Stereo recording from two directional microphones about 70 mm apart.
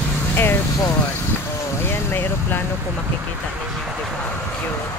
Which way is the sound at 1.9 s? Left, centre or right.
Left.